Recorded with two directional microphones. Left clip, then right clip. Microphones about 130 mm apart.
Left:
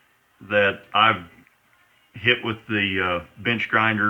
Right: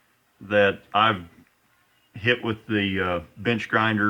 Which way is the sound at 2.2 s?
90° right.